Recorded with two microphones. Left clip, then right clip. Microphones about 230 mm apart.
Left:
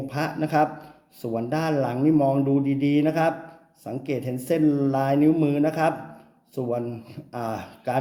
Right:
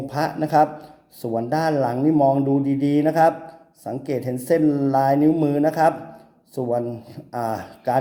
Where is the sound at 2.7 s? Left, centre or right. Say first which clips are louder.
Right 2 dB; right.